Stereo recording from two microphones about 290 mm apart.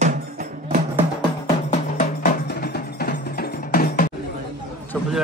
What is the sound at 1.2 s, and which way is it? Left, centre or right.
Music, left.